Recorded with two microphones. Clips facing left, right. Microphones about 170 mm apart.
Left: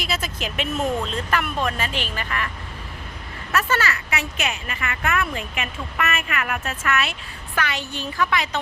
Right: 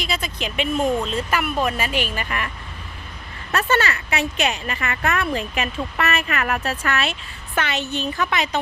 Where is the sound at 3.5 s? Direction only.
30° right (ahead or behind).